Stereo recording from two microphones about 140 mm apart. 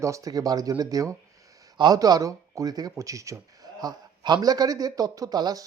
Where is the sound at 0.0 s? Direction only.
25° right (ahead or behind).